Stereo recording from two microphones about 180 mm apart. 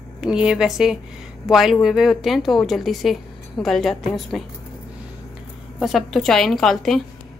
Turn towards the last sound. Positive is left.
turn(degrees=0)  # may be behind; listen again after turning